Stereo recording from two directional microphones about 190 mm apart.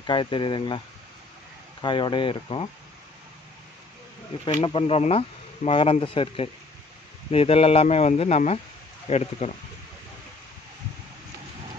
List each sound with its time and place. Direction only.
0.0 s speech: 25° left (ahead or behind)
4.5 s speech: 25° left (ahead or behind)